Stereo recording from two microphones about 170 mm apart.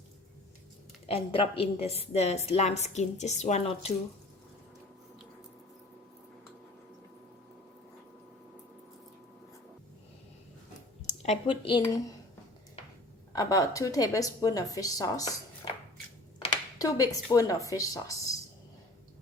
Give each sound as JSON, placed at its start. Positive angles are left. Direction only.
{"t": 1.0, "sound": "a woman's voice", "side_deg": 35}
{"t": 11.0, "sound": "speech", "side_deg": 40}
{"t": 13.3, "sound": "a woman's voice", "side_deg": 20}
{"t": 16.4, "sound": "a sound", "side_deg": 20}
{"t": 17.3, "sound": "a woman's voice", "side_deg": 20}